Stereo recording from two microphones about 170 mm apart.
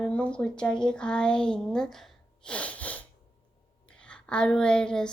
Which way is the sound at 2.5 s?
10° left (ahead or behind).